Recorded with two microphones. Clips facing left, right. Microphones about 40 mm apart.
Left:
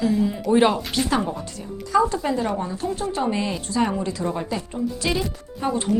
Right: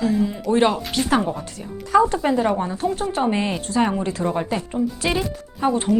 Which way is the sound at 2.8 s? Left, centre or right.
Right.